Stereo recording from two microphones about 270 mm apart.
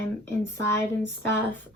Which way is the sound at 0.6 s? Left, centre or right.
Centre.